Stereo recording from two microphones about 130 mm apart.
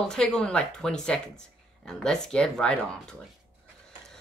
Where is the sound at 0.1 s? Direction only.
5° left (ahead or behind).